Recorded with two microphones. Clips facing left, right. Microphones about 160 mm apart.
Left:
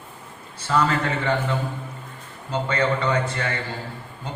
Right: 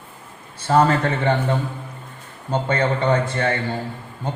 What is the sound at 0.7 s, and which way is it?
A man's voice, 45° right (ahead or behind).